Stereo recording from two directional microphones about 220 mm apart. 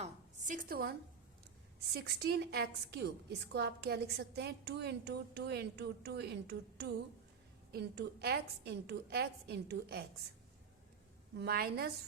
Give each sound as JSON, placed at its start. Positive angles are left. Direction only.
{"t": 0.0, "sound": "a sound", "side_deg": -35}
{"t": 1.9, "sound": "a woman's voice", "side_deg": -45}
{"t": 11.3, "sound": "a woman's voice", "side_deg": -45}